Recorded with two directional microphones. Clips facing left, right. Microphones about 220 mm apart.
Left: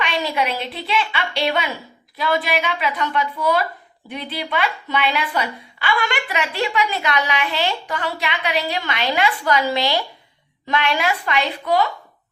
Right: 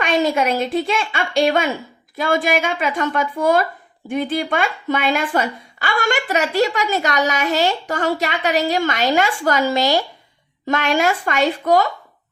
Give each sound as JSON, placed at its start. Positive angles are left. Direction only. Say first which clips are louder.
{"t": 0.0, "sound": "a woman's voice", "louder": "right 5 dB", "side_deg": -45}